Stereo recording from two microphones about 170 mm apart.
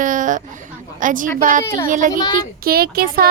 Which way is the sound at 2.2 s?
25° left (ahead or behind).